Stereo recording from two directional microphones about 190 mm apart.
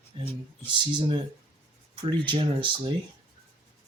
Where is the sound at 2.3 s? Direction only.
25° right (ahead or behind).